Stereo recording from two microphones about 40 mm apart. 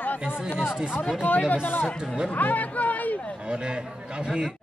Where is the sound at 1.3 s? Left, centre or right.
Left.